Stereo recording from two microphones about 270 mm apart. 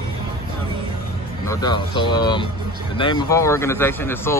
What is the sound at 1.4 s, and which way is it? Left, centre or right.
Speech, centre.